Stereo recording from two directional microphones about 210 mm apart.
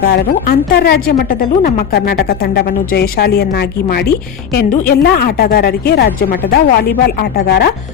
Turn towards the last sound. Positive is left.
turn(degrees=50)  # may be behind; listen again after turning